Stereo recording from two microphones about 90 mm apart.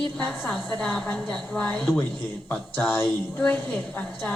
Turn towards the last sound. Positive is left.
turn(degrees=20)  # may be behind; listen again after turning